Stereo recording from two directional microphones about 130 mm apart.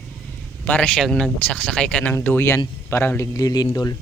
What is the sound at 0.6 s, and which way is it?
Speech, 10° left (ahead or behind).